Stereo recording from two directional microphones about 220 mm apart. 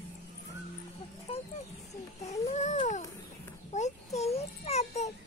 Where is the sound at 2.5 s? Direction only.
30° left (ahead or behind).